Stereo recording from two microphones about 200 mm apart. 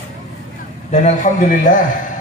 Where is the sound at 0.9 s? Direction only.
35° left (ahead or behind).